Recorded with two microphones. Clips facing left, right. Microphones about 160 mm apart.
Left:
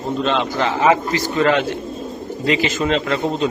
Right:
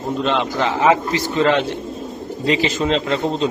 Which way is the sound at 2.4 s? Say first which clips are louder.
Even; 35° right (ahead or behind).